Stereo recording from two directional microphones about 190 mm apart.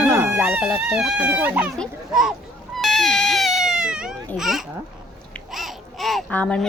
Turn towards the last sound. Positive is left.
turn(degrees=5)  # may be behind; listen again after turning